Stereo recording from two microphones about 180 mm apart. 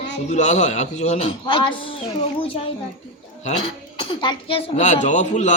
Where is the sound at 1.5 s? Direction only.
30° left (ahead or behind).